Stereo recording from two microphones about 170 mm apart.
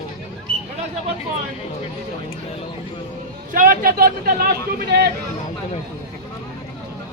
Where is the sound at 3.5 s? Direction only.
55° right (ahead or behind).